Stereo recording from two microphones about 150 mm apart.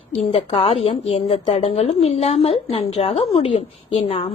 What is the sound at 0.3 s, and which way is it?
A woman's voice, 40° left (ahead or behind).